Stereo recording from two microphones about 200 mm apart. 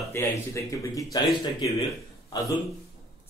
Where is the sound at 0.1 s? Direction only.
15° left (ahead or behind).